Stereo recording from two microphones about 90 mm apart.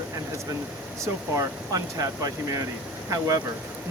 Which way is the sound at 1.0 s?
40° right (ahead or behind).